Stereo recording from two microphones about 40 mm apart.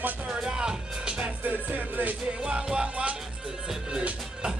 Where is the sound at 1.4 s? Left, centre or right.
Right.